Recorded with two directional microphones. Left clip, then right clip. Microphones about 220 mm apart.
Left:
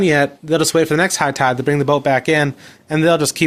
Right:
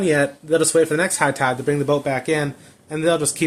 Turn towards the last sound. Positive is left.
turn(degrees=45)  # may be behind; listen again after turning